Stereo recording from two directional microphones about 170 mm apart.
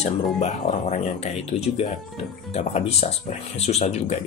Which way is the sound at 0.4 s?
40° left (ahead or behind).